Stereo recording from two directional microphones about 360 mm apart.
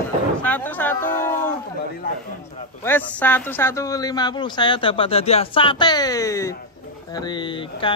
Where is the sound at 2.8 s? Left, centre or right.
Centre.